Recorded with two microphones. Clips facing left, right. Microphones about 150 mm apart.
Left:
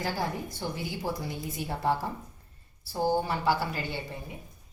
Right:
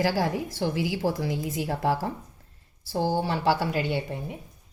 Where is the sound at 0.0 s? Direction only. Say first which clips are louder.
Right 6 dB; 90° right.